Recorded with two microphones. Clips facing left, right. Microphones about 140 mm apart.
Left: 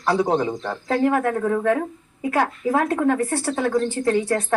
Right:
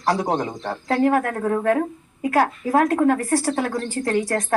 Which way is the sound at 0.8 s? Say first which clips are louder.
Right 1 dB; 45° right (ahead or behind).